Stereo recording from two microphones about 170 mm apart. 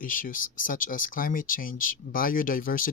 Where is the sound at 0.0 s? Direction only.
55° left (ahead or behind).